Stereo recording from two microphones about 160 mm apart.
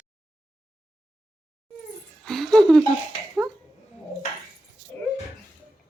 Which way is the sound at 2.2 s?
Centre (ahead or behind).